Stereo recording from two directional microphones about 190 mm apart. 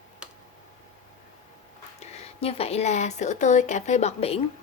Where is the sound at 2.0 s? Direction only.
35° left (ahead or behind).